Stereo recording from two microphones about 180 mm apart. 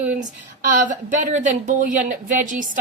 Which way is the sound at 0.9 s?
45° right (ahead or behind).